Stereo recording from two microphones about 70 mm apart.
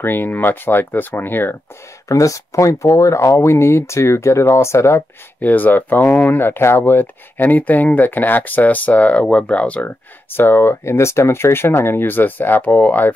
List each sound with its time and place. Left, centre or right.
0.0 s speech: left
2.0 s speech: left
5.4 s speech: left
10.3 s speech: left